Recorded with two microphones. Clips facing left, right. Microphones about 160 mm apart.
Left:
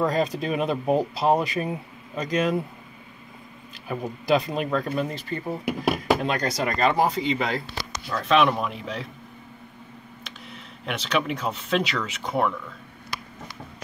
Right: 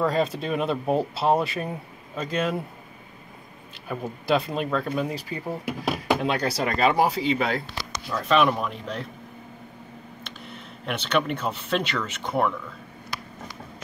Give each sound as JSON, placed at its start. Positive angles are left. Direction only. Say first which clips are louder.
{"t": 0.0, "sound": "speech", "louder": "even", "side_deg": -5}
{"t": 3.8, "sound": "speech", "louder": "left 1 dB", "side_deg": 0}
{"t": 5.0, "sound": "speech", "louder": "even", "side_deg": -5}
{"t": 10.2, "sound": "speech", "louder": "right 1 dB", "side_deg": 0}